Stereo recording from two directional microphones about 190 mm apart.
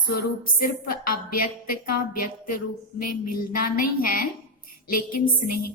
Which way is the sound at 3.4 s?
50° left (ahead or behind).